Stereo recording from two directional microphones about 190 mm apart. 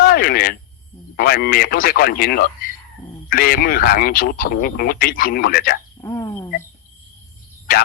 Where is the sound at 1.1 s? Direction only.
55° left (ahead or behind).